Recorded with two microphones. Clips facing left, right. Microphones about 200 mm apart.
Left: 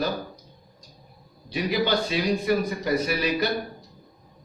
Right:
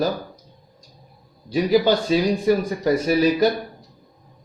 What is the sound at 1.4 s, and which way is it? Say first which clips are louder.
A man's voice: right 7 dB; 40° right (ahead or behind).